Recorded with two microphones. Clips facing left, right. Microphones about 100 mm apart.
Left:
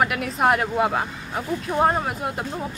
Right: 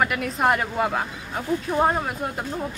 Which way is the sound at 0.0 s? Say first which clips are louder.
Left 1 dB; centre (ahead or behind).